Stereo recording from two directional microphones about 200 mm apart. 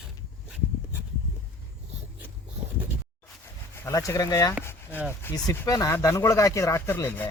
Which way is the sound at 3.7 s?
15° left (ahead or behind).